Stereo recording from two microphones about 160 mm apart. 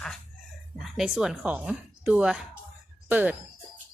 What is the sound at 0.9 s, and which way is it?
A woman's voice, 5° right (ahead or behind).